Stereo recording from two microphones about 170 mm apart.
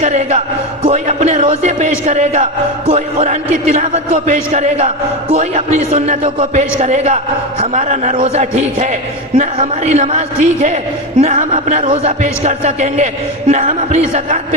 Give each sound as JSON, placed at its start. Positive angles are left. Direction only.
{"t": 0.0, "sound": "a man's voice", "side_deg": -40}